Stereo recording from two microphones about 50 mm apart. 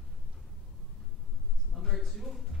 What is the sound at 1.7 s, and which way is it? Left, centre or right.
Speech, centre.